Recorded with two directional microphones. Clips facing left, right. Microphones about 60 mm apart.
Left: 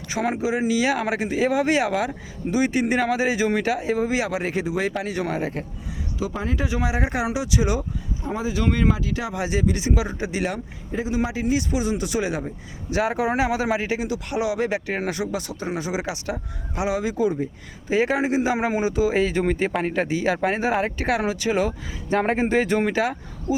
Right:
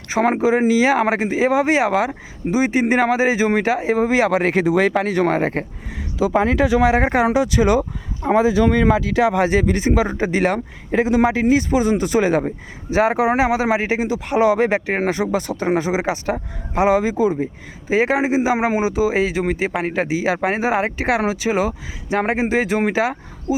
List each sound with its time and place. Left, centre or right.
0.1 s speech: right
6.3 s speech: right
6.9 s speech: right
7.8 s speech: right
9.0 s speech: right
9.3 s speech: right
10.9 s a man's voice: right
11.3 s speech: right
12.9 s speech: right
15.9 s speech: right
17.8 s speech: right
19.3 s speech: centre